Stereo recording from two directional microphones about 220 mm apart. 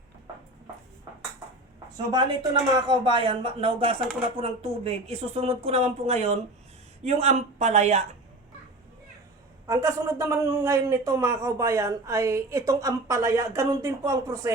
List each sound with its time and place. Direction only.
2.0 s speech: 20° right (ahead or behind)
9.6 s speech: 15° right (ahead or behind)